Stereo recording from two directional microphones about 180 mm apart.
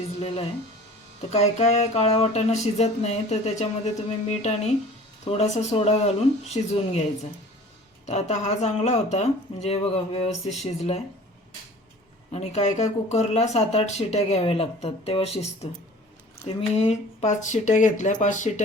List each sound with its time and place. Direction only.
1.3 s speech: 40° left (ahead or behind)
8.0 s speech: 40° left (ahead or behind)
12.3 s speech: 35° left (ahead or behind)